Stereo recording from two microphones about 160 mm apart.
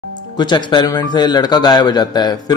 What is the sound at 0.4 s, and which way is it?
A man's voice, 30° left (ahead or behind).